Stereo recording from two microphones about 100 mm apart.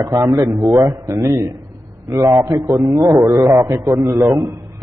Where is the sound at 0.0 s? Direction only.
35° right (ahead or behind).